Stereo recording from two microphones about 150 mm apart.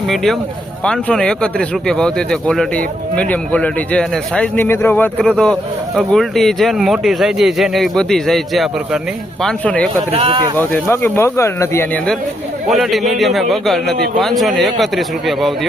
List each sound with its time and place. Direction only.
0.1 s speech: centre (ahead or behind)
10.1 s speech: 40° right (ahead or behind)
10.6 s speech: 15° left (ahead or behind)
12.7 s speech: centre (ahead or behind)